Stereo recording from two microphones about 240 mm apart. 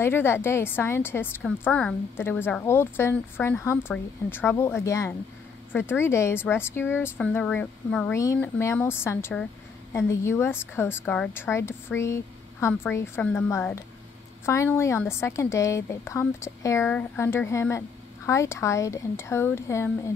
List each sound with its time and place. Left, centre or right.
0.0 s a woman's voice: centre